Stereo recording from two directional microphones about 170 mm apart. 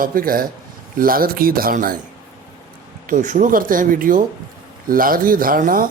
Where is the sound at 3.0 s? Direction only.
50° right (ahead or behind).